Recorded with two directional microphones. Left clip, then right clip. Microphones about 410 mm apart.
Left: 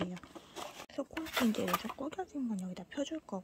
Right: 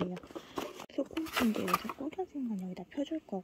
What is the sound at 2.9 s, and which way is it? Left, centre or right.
Speech, centre.